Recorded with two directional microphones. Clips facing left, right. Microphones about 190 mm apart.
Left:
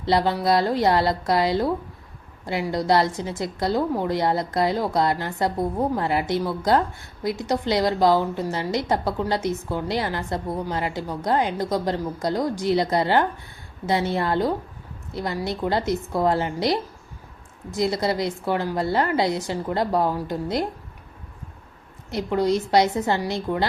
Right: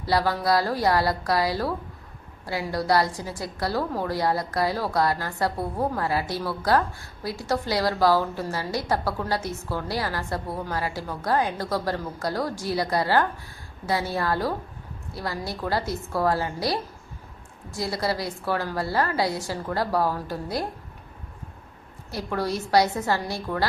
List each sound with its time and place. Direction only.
0.0 s a woman's voice: 20° left (ahead or behind)
22.1 s a woman's voice: 20° left (ahead or behind)